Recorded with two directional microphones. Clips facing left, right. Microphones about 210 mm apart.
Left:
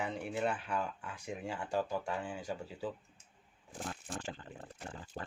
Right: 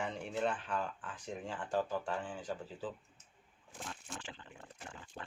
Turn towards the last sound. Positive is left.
turn(degrees=35)  # may be behind; listen again after turning